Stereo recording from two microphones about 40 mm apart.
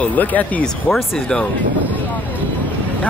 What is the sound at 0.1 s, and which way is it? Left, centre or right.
Speech, left.